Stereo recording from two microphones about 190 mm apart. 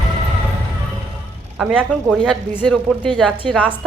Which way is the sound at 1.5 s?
Centre (ahead or behind).